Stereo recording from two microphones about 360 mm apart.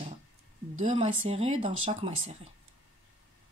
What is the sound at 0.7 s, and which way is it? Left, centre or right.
Speech, centre.